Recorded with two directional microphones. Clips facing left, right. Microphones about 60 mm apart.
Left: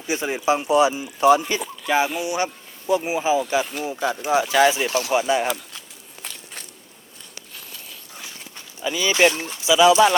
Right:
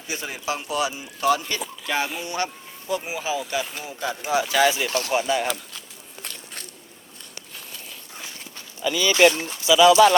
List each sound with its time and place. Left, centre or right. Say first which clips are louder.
0.1 s speech: left 8 dB; left; by 2.2 s centre
2.2 s speech: left 4 dB; centre
5.1 s speech: left 3 dB; centre
6.2 s walk: left 1 dB; centre
7.7 s a sound: right 1 dB; centre
8.8 s speech: right 1 dB; centre